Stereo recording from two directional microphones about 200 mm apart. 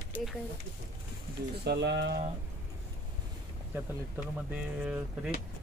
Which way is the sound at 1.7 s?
60° right (ahead or behind).